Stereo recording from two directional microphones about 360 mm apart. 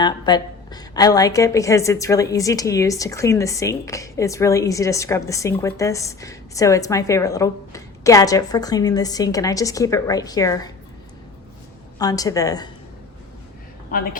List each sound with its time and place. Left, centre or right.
0.0 s a woman's voice: centre
11.9 s a woman's voice: centre
13.9 s a woman's voice: left